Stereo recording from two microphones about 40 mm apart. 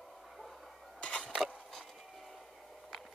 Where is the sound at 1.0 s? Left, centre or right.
Left.